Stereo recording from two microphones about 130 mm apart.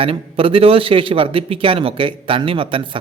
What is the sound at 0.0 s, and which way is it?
Speech, 45° right (ahead or behind).